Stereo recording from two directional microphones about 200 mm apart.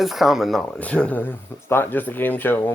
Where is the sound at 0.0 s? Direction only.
Centre (ahead or behind).